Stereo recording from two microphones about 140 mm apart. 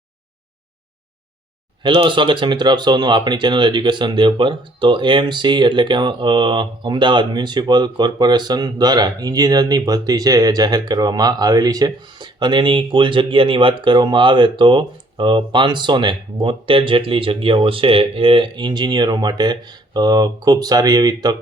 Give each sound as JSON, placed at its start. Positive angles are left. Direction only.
{"t": 1.8, "sound": "speech", "side_deg": -35}